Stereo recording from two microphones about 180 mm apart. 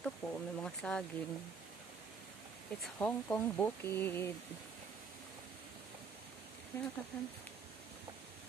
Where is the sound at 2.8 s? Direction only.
5° left (ahead or behind).